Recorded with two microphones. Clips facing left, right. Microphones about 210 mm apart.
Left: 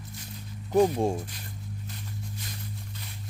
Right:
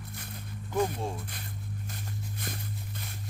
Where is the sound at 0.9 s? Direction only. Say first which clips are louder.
Left 9 dB; 45° left (ahead or behind).